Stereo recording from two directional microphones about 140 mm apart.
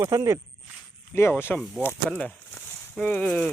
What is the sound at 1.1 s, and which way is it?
Speech, 15° left (ahead or behind).